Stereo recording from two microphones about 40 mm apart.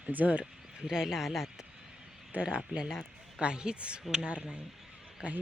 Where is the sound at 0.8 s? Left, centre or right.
Centre.